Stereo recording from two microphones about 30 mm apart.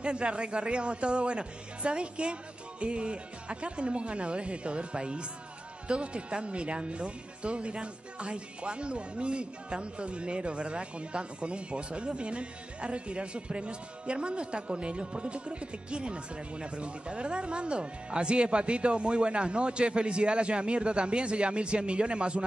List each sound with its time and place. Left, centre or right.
0.0 s speech: right